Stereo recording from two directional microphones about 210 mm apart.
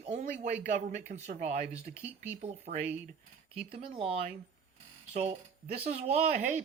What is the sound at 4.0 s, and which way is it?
Speech, 30° right (ahead or behind).